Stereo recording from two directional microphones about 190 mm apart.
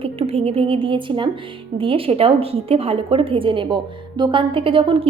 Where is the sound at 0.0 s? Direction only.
30° right (ahead or behind).